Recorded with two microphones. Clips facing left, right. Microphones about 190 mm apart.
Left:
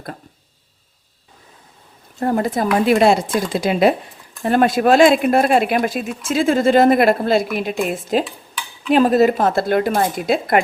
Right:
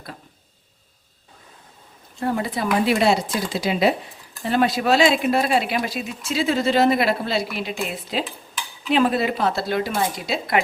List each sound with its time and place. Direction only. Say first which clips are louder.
2.1 s speech: left 5 dB; 45° left (ahead or behind)